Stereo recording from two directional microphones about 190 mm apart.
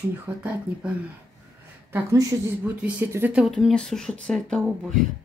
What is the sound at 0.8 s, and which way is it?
Speech, 5° right (ahead or behind).